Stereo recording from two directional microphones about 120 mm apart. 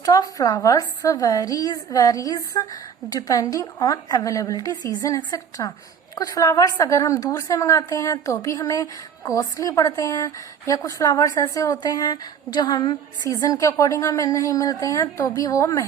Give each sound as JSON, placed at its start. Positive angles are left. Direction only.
{"t": 0.0, "sound": "a woman's voice", "side_deg": 30}